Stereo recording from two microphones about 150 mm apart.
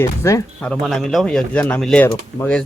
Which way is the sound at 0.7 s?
5° left (ahead or behind).